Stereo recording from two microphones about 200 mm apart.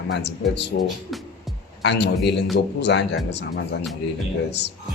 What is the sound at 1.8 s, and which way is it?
A man's voice, 60° left (ahead or behind).